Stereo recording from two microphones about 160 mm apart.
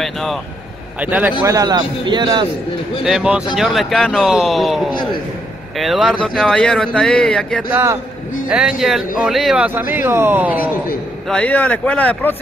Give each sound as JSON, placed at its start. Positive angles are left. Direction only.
{"t": 0.0, "sound": "vehicle", "side_deg": 0}
{"t": 0.9, "sound": "speech", "side_deg": -10}
{"t": 1.4, "sound": "a man's voice", "side_deg": -20}
{"t": 3.0, "sound": "speech", "side_deg": -5}
{"t": 7.7, "sound": "speech", "side_deg": -15}
{"t": 8.5, "sound": "speech", "side_deg": -5}
{"t": 11.2, "sound": "speech", "side_deg": 5}